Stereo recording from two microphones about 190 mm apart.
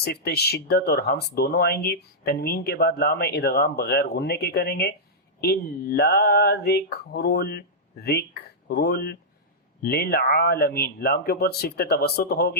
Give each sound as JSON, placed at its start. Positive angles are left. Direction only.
{"t": 0.0, "sound": "speech", "side_deg": 55}